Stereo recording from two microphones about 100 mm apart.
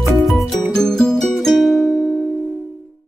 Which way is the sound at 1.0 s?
5° left (ahead or behind).